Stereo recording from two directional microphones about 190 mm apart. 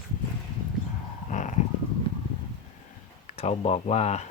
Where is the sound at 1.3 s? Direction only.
40° left (ahead or behind).